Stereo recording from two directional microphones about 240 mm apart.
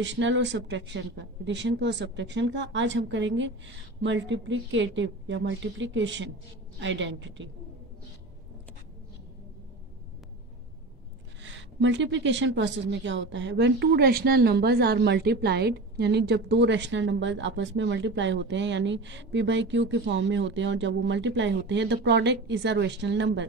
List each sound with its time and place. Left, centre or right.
0.0 s a woman's voice: right
11.4 s a woman's voice: right